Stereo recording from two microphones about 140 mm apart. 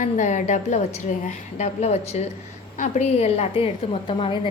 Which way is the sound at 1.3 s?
50° left (ahead or behind).